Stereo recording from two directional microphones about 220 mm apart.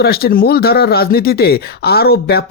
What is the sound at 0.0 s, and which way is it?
Speech, 45° left (ahead or behind).